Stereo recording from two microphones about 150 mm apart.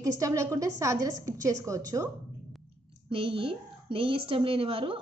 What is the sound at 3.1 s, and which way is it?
A woman's voice, 35° right (ahead or behind).